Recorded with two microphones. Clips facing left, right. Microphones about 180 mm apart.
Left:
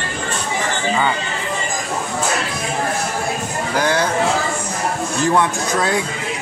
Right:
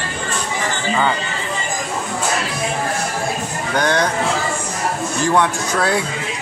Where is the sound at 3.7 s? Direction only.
5° left (ahead or behind).